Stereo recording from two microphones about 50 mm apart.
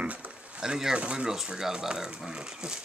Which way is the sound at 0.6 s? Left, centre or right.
Centre.